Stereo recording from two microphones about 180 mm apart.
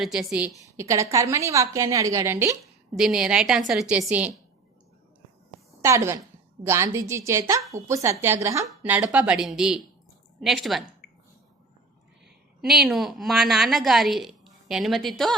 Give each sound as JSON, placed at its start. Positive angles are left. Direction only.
{"t": 0.0, "sound": "a woman's voice", "side_deg": -5}
{"t": 3.0, "sound": "a woman's voice", "side_deg": -5}
{"t": 5.8, "sound": "a woman's voice", "side_deg": -15}
{"t": 12.6, "sound": "a woman's voice", "side_deg": 0}